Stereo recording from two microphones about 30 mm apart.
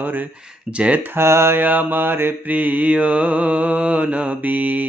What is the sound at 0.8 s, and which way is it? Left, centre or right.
Speech, right.